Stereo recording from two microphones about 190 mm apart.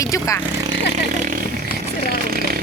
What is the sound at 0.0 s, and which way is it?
Speech, 15° left (ahead or behind).